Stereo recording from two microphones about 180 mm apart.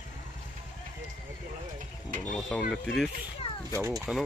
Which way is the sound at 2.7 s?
Centre (ahead or behind).